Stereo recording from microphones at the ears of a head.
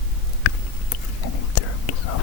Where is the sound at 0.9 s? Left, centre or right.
Left.